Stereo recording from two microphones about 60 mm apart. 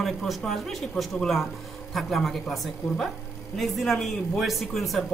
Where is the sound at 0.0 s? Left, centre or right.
Centre.